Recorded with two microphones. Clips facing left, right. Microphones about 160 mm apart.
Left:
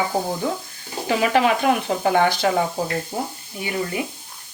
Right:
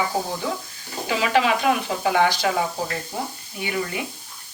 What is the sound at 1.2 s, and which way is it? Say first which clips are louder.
Speech: left 2 dB; 45° left (ahead or behind).